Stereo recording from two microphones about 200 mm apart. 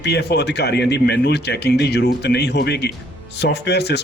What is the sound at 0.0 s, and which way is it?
Speech, 55° left (ahead or behind).